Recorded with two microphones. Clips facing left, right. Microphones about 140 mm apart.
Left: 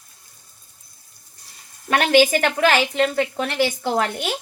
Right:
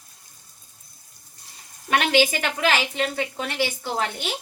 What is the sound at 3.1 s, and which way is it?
Speech, 60° left (ahead or behind).